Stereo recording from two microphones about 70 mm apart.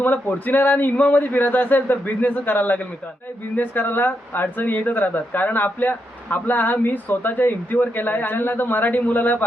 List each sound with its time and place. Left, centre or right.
0.0 s speech: left